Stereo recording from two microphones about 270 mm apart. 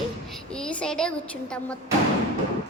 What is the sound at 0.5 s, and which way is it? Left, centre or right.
A woman's voice, centre.